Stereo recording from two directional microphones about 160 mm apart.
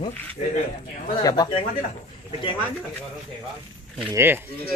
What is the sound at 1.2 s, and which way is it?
Speech, 30° left (ahead or behind).